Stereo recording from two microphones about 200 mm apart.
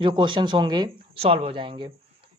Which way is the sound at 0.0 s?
25° right (ahead or behind).